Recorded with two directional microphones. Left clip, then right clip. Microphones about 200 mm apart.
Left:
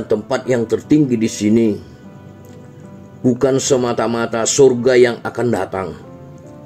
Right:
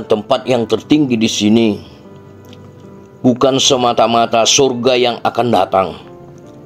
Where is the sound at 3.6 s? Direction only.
15° right (ahead or behind).